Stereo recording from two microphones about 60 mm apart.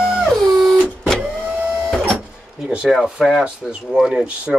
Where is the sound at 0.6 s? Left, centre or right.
Centre.